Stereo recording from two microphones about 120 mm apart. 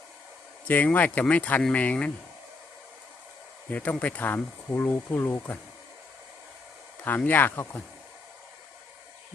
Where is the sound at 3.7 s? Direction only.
10° left (ahead or behind).